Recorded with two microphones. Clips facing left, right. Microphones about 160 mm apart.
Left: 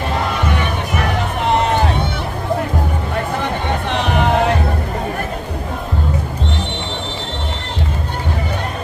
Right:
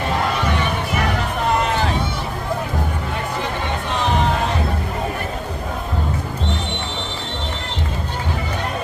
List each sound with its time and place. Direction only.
3.9 s music: 65° left (ahead or behind)